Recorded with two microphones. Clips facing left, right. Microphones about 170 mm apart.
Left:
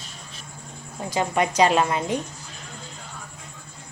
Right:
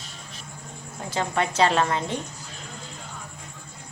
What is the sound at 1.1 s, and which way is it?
Speech, 15° left (ahead or behind).